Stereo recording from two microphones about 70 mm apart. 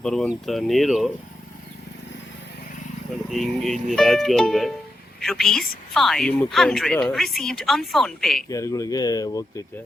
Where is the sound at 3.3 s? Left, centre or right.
Centre.